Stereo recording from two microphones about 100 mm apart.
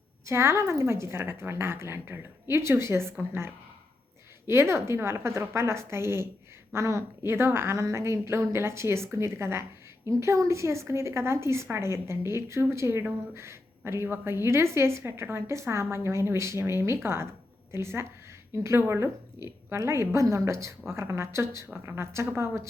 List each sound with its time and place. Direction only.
0.3 s a woman's voice: 25° right (ahead or behind)